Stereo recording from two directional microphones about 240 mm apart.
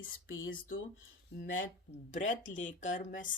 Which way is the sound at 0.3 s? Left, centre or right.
Left.